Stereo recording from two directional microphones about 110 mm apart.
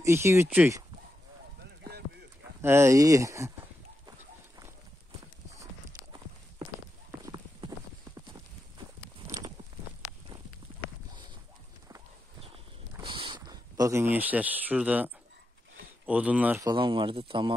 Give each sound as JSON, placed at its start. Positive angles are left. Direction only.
{"t": 0.0, "sound": "speech", "side_deg": -25}
{"t": 2.6, "sound": "speech", "side_deg": -25}
{"t": 7.1, "sound": "clip-clop", "side_deg": -30}
{"t": 13.0, "sound": "a sound", "side_deg": -50}
{"t": 13.5, "sound": "speech", "side_deg": -30}
{"t": 16.1, "sound": "speech", "side_deg": -10}
{"t": 16.7, "sound": "speech", "side_deg": -50}